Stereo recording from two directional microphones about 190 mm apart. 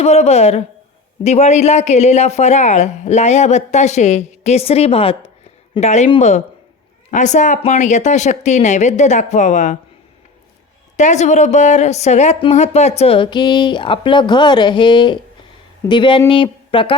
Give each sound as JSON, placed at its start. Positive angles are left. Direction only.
{"t": 0.0, "sound": "speech", "side_deg": 35}
{"t": 10.9, "sound": "speech", "side_deg": 40}